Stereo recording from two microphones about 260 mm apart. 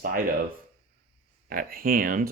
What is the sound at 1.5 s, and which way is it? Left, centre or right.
Speech, right.